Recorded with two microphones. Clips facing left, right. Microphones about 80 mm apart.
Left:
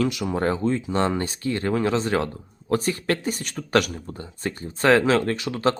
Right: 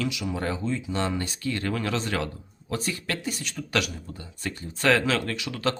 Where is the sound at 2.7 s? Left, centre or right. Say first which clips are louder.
Left 7 dB; left.